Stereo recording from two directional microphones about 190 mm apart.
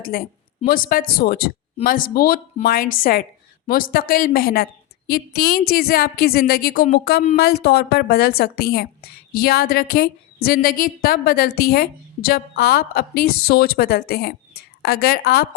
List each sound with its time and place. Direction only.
0.0 s a woman's voice: 50° left (ahead or behind)